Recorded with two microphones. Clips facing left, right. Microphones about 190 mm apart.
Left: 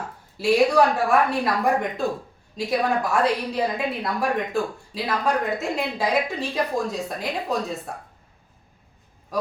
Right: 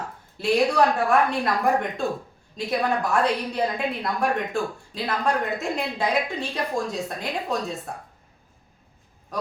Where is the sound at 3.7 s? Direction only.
5° left (ahead or behind).